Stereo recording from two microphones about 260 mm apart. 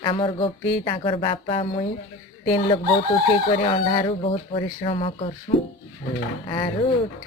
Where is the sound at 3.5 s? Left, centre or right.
Left.